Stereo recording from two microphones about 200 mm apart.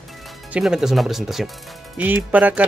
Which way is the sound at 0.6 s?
5° right (ahead or behind).